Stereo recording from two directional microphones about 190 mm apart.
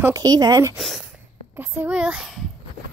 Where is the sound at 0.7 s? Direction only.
Centre (ahead or behind).